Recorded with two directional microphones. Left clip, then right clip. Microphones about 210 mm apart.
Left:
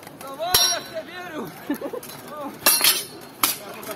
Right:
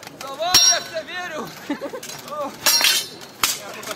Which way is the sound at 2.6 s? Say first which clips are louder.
Right 3 dB; centre (ahead or behind).